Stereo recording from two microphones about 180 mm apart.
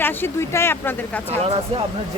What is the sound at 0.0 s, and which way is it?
Speech, 10° left (ahead or behind).